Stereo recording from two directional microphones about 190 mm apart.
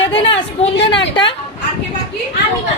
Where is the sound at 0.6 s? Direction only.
30° left (ahead or behind).